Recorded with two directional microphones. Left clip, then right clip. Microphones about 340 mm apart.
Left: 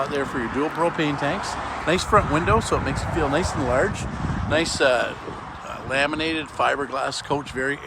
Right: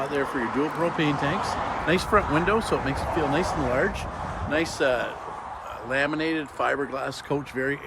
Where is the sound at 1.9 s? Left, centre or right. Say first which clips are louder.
Left 4 dB; centre.